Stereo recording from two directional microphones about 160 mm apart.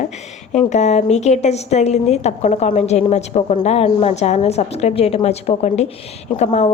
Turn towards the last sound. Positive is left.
turn(degrees=45)  # may be behind; listen again after turning